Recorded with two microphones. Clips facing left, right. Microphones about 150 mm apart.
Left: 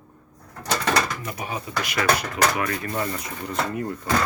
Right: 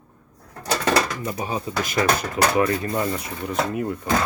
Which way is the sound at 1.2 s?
30° right (ahead or behind).